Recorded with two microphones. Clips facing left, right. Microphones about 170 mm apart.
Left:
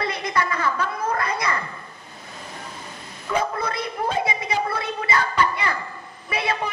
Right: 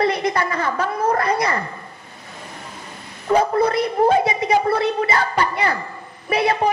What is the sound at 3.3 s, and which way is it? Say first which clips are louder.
A woman's voice: right 8 dB; 40° right (ahead or behind).